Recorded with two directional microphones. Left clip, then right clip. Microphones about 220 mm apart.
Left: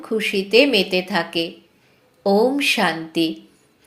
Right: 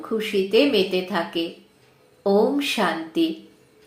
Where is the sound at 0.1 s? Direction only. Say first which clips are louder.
Left 3 dB; 35° left (ahead or behind).